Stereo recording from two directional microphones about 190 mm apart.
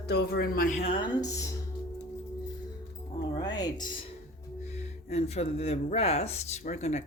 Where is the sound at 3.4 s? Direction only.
20° left (ahead or behind).